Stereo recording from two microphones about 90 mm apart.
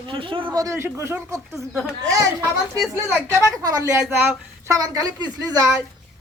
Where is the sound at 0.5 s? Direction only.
35° right (ahead or behind).